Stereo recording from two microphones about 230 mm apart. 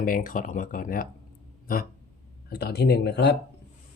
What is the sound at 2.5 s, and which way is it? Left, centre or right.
Speech, left.